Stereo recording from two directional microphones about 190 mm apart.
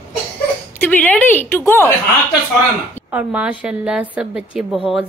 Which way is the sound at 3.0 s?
5° right (ahead or behind).